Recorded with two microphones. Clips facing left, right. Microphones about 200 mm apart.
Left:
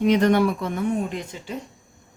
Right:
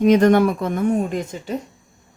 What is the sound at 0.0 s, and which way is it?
Speech, 45° right (ahead or behind).